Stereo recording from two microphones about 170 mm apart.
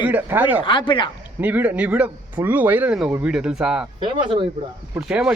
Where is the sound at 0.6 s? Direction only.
30° left (ahead or behind).